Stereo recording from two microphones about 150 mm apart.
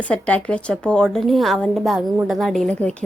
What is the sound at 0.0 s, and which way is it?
A woman's voice, 10° left (ahead or behind).